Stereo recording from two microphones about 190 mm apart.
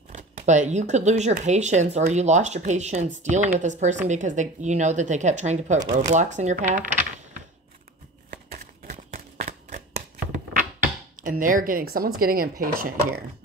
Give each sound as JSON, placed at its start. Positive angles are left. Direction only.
{"t": 0.1, "sound": "speech", "side_deg": -40}
{"t": 8.5, "sound": "a sound", "side_deg": -40}
{"t": 11.2, "sound": "speech", "side_deg": -45}